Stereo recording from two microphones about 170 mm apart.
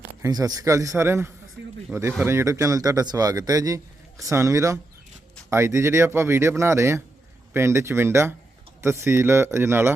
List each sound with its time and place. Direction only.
0.2 s speech: 20° right (ahead or behind)
1.6 s a sound: 90° right
1.9 s speech: 15° right (ahead or behind)